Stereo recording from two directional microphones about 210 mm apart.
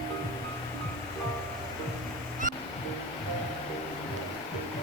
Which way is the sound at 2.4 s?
40° right (ahead or behind).